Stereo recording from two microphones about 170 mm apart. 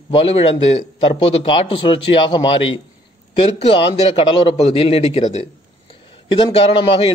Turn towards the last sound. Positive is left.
turn(degrees=35)  # may be behind; listen again after turning